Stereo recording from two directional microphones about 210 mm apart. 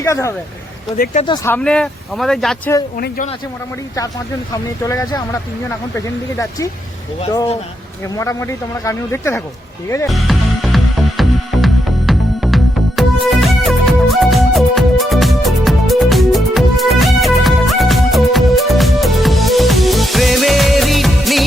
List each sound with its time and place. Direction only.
0.0 s speech: 15° left (ahead or behind)
0.9 s speech: 45° left (ahead or behind)
1.5 s speech: 5° left (ahead or behind)
4.5 s speech: 15° left (ahead or behind)
8.1 s speech: 15° left (ahead or behind)
10.1 s music: centre (ahead or behind)